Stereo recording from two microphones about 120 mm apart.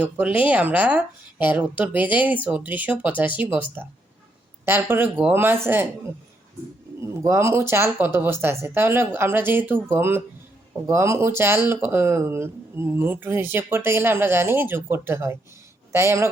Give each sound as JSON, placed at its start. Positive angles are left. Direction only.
{"t": 0.0, "sound": "speech", "side_deg": -10}
{"t": 7.0, "sound": "speech", "side_deg": -25}